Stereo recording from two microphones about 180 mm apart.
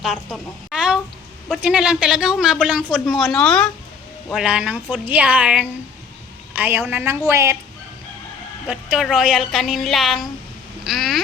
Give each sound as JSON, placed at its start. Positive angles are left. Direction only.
{"t": 0.0, "sound": "a woman's voice", "side_deg": -5}
{"t": 8.6, "sound": "a woman's voice", "side_deg": -5}